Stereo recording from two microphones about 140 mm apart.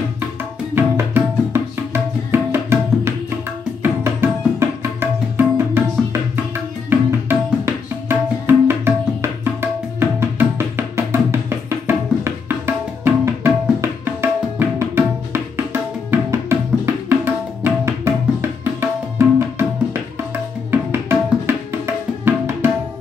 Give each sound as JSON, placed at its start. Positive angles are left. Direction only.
{"t": 0.7, "sound": "tabla", "side_deg": -15}
{"t": 3.8, "sound": "music", "side_deg": -15}
{"t": 6.9, "sound": "tabla", "side_deg": -15}
{"t": 11.9, "sound": "music", "side_deg": -15}
{"t": 18.6, "sound": "tabla", "side_deg": -15}
{"t": 20.7, "sound": "music", "side_deg": -15}